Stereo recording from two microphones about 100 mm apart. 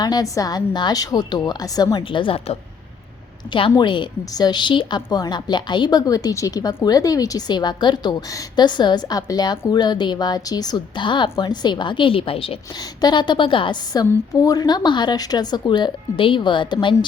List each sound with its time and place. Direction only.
0.0 s a woman's voice: 40° left (ahead or behind)
2.0 s a woman's voice: 60° left (ahead or behind)
3.5 s a woman's voice: 55° left (ahead or behind)
13.0 s a woman's voice: 45° left (ahead or behind)